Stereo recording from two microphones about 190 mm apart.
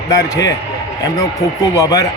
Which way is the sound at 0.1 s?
15° left (ahead or behind).